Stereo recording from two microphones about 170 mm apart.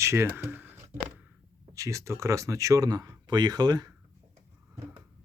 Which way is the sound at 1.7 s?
20° right (ahead or behind).